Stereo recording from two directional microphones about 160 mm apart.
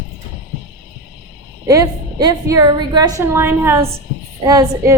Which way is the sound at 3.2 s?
15° right (ahead or behind).